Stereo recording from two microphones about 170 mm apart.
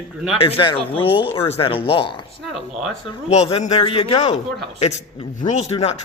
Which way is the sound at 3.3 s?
40° left (ahead or behind).